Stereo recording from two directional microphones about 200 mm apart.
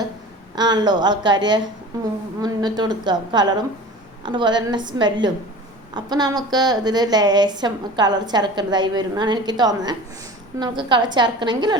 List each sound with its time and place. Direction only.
0.5 s a woman's voice: 20° right (ahead or behind)